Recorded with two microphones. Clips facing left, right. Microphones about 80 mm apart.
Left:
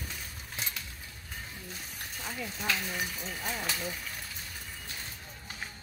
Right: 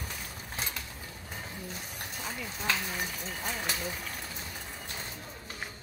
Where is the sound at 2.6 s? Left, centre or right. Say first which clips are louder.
Right 1 dB; centre.